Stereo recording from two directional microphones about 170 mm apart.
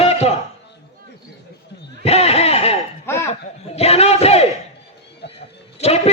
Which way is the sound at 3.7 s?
35° left (ahead or behind).